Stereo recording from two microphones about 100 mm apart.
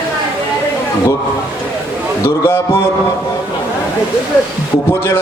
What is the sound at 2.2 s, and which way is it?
Speech, 25° left (ahead or behind).